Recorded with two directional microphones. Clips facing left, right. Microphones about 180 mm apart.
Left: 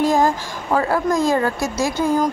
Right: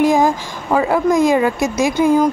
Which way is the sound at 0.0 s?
15° right (ahead or behind).